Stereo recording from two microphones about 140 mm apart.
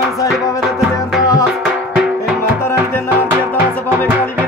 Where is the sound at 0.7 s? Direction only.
5° right (ahead or behind).